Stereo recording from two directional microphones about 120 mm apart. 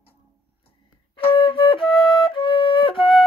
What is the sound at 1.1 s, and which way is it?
Flute, 45° left (ahead or behind).